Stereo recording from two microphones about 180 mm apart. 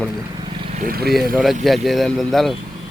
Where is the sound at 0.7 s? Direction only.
55° right (ahead or behind).